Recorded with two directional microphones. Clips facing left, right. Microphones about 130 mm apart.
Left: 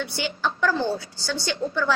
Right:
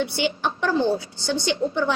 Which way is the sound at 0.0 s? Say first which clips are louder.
Right 4 dB; 20° right (ahead or behind).